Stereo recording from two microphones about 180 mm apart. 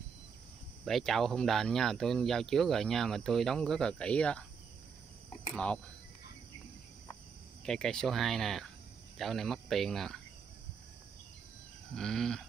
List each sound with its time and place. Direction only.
0.8 s speech: centre (ahead or behind)
5.5 s speech: 5° left (ahead or behind)
7.6 s speech: 5° left (ahead or behind)
11.9 s speech: centre (ahead or behind)